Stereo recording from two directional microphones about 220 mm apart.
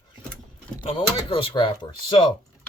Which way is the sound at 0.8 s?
25° left (ahead or behind).